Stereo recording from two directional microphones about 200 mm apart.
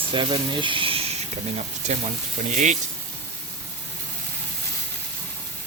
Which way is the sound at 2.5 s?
35° right (ahead or behind).